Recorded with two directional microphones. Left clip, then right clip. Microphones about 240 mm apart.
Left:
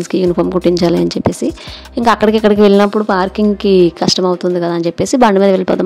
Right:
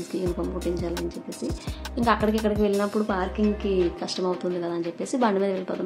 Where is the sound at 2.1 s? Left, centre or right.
Left.